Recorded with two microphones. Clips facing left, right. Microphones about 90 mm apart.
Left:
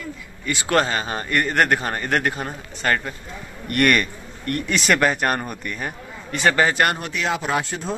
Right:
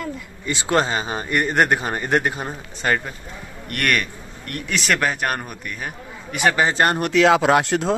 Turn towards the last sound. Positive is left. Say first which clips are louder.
# right 7 dB
turn(degrees=-75)  # may be behind; listen again after turning